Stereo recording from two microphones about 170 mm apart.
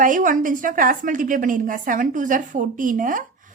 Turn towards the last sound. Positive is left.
turn(degrees=-50)  # may be behind; listen again after turning